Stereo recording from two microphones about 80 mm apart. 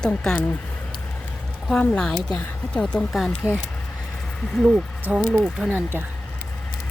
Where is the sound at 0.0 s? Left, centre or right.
Centre.